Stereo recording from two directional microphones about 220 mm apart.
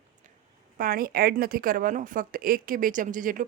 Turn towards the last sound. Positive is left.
turn(degrees=-35)  # may be behind; listen again after turning